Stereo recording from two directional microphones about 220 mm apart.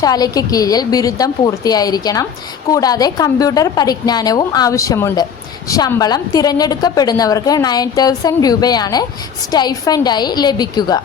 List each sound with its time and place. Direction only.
0.0 s a woman's voice: 15° left (ahead or behind)